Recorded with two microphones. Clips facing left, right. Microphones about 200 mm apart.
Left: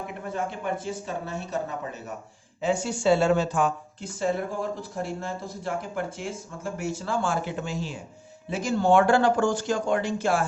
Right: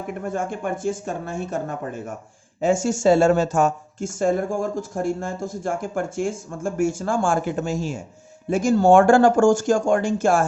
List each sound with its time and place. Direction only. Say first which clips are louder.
0.1 s speech: right 8 dB; 50° right (ahead or behind)